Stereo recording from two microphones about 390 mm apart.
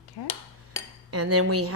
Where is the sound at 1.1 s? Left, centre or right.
Right.